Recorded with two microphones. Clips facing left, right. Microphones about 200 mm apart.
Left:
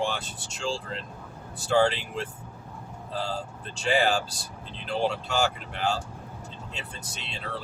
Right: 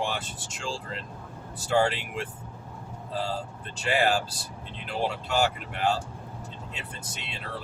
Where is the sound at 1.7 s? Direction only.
5° right (ahead or behind).